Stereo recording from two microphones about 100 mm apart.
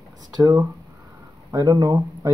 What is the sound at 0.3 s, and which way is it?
Speech, 35° right (ahead or behind).